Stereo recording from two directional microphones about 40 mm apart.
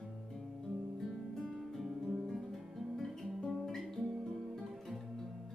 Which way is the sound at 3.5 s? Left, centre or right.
Centre.